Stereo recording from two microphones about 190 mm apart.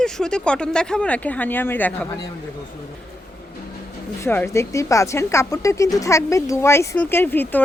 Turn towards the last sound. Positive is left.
turn(degrees=10)  # may be behind; listen again after turning